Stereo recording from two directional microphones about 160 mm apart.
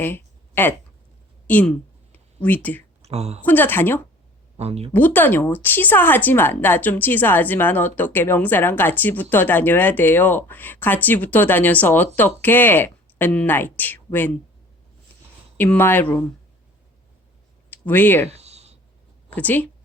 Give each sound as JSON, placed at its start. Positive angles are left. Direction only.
{"t": 0.0, "sound": "a sound", "side_deg": 15}
{"t": 1.5, "sound": "speech", "side_deg": 10}
{"t": 3.0, "sound": "a woman's voice", "side_deg": -40}
{"t": 3.4, "sound": "speech", "side_deg": 10}
{"t": 4.5, "sound": "speech", "side_deg": -40}
{"t": 4.9, "sound": "speech", "side_deg": 10}
{"t": 15.5, "sound": "speech", "side_deg": 10}
{"t": 17.7, "sound": "speech", "side_deg": 10}
{"t": 18.3, "sound": "a sound", "side_deg": -40}
{"t": 19.3, "sound": "a woman's voice", "side_deg": 10}